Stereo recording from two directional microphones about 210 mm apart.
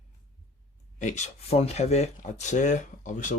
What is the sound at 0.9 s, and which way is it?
Speech, 35° left (ahead or behind).